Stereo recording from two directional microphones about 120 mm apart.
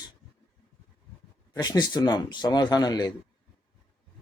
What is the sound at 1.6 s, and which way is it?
Speech, 35° left (ahead or behind).